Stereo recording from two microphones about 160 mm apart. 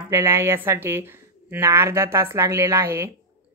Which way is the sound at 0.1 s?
15° right (ahead or behind).